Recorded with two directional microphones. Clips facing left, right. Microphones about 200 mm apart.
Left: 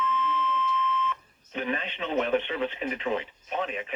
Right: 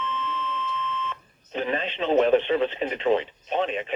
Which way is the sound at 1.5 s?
30° right (ahead or behind).